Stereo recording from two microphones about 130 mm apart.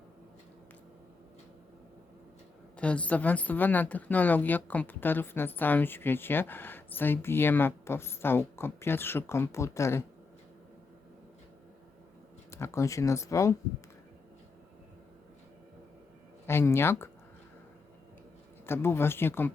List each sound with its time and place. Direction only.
2.7 s a woman's voice: 10° left (ahead or behind)
12.5 s speech: 20° left (ahead or behind)
16.5 s speech: 20° left (ahead or behind)
18.6 s a woman's voice: 20° left (ahead or behind)